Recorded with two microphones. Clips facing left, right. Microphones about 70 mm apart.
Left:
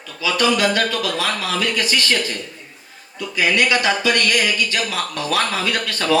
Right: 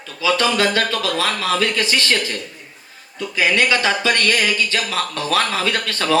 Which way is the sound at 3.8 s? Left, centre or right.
Right.